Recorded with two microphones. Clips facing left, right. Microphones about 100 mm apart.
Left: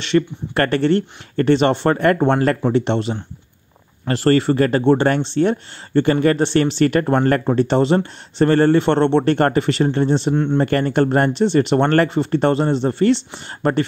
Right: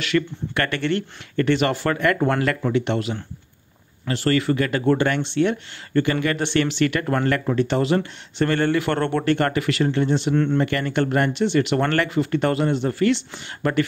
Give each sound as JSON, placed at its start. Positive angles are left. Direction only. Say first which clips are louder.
{"t": 0.1, "sound": "speech", "louder": "left 5 dB", "side_deg": 30}
{"t": 10.3, "sound": "speech", "louder": "left 2 dB", "side_deg": 20}
{"t": 10.6, "sound": "speech", "louder": "left 5 dB", "side_deg": 40}